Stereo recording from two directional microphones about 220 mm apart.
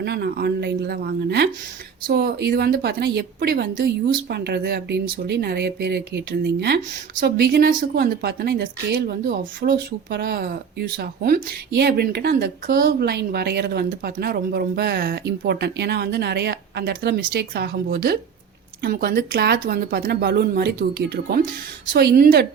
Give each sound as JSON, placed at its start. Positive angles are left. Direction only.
{"t": 0.0, "sound": "speech", "side_deg": -45}
{"t": 21.9, "sound": "speech", "side_deg": -45}